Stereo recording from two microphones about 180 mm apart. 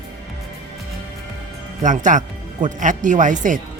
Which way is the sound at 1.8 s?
45° right (ahead or behind).